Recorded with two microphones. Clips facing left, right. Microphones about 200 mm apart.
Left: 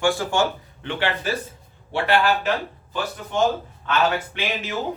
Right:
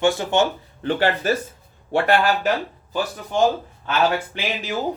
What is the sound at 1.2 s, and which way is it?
Speech, 45° right (ahead or behind).